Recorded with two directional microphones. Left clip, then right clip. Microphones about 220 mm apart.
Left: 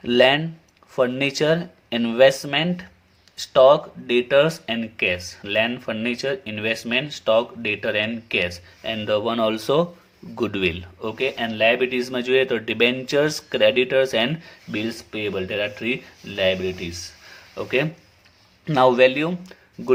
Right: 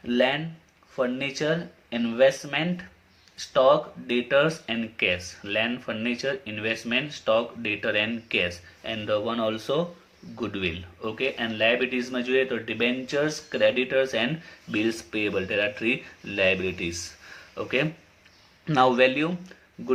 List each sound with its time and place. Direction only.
0.0 s speech: 40° left (ahead or behind); by 17.0 s 15° left (ahead or behind)
17.5 s speech: 30° left (ahead or behind)